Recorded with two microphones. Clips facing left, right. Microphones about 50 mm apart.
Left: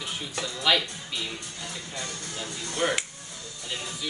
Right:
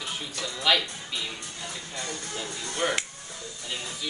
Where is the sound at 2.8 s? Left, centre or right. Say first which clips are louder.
Left 1 dB; centre.